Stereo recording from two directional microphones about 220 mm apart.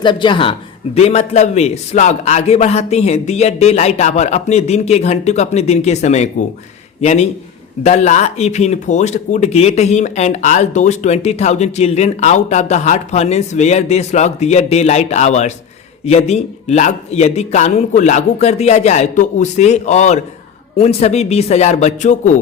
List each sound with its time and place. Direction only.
0.0 s a man's voice: 20° left (ahead or behind)